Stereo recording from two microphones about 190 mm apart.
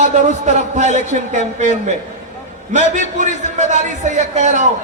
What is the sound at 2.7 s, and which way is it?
A man's voice, 40° right (ahead or behind).